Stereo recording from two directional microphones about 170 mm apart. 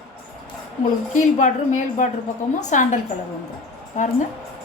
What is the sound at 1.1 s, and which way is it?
A woman's voice, 45° left (ahead or behind).